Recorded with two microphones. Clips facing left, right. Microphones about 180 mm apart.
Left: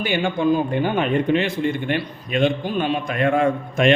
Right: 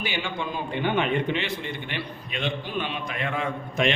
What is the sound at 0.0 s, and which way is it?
A man's voice, 50° left (ahead or behind).